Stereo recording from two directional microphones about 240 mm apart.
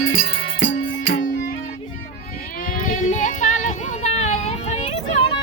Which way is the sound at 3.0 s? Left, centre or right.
Left.